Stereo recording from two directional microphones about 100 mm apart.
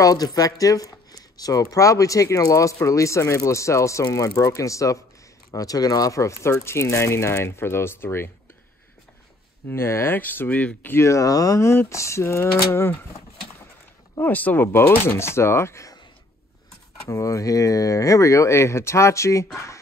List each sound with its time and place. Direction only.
0.0 s speech: 40° left (ahead or behind)
9.7 s speech: 25° left (ahead or behind)
14.2 s speech: 15° left (ahead or behind)
17.1 s speech: 35° left (ahead or behind)